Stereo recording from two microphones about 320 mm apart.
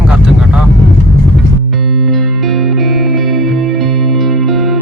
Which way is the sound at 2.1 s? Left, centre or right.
Centre.